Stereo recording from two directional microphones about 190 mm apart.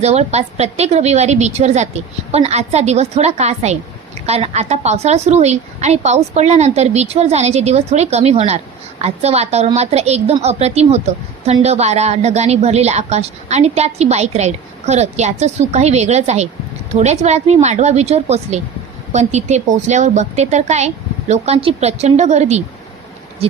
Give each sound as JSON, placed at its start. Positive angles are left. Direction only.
{"t": 0.0, "sound": "a woman's voice", "side_deg": -35}